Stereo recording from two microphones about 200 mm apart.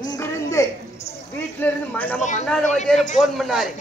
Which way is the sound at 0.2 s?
15° left (ahead or behind).